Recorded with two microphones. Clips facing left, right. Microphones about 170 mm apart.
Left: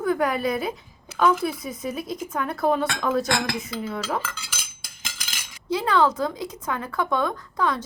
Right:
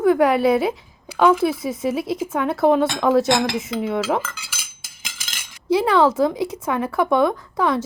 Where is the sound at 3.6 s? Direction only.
90° right.